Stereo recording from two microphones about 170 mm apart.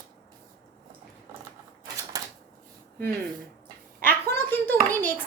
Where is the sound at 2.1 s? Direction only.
20° right (ahead or behind).